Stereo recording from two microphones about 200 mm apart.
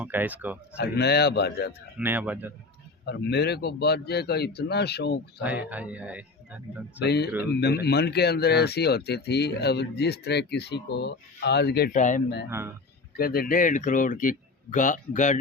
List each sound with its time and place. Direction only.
0.0 s speech: 10° right (ahead or behind)
0.8 s speech: 55° left (ahead or behind)
2.0 s speech: 10° right (ahead or behind)
3.1 s speech: 60° left (ahead or behind)
5.4 s speech: 5° right (ahead or behind)
7.0 s speech: 55° left (ahead or behind)
12.5 s speech: 10° right (ahead or behind)
13.1 s speech: 50° left (ahead or behind)